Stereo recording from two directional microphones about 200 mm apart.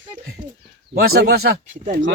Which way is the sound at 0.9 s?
50° right (ahead or behind).